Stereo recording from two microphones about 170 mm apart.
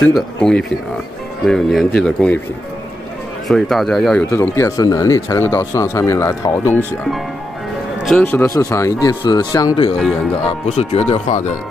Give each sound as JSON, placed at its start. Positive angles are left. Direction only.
{"t": 0.0, "sound": "speech", "side_deg": 5}
{"t": 3.4, "sound": "speech", "side_deg": 0}
{"t": 8.0, "sound": "speech", "side_deg": 5}
{"t": 10.8, "sound": "speech", "side_deg": 35}